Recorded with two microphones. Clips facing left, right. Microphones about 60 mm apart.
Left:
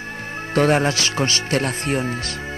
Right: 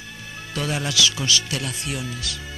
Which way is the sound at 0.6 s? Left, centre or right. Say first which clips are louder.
Left 7 dB; left.